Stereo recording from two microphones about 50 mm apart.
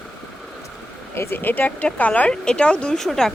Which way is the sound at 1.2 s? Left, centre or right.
Left.